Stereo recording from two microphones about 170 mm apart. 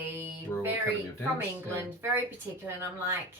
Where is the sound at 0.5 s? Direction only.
15° left (ahead or behind).